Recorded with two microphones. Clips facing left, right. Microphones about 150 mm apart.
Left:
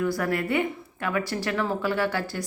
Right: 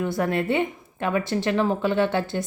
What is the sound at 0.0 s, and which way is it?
A woman's voice, 25° right (ahead or behind).